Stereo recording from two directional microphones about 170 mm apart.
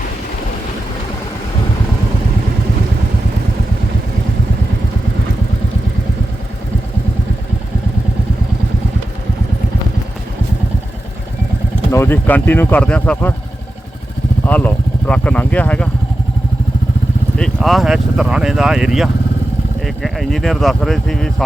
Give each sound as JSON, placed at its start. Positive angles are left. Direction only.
{"t": 11.9, "sound": "speech", "side_deg": 15}
{"t": 14.4, "sound": "speech", "side_deg": 10}
{"t": 17.3, "sound": "speech", "side_deg": 0}